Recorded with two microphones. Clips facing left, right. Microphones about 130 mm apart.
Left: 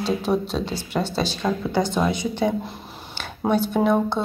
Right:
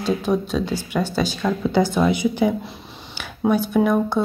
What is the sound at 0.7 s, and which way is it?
Speech, 30° left (ahead or behind).